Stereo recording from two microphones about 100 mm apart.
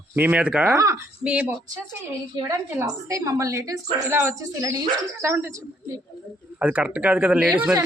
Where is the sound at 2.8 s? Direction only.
30° right (ahead or behind).